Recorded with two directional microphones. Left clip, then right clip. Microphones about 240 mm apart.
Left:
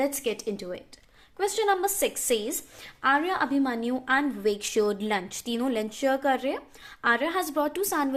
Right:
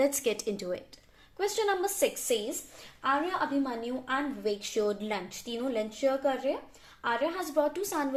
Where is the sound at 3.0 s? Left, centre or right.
Left.